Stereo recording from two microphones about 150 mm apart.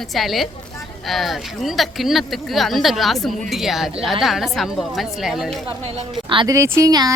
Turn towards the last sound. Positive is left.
turn(degrees=-25)  # may be behind; listen again after turning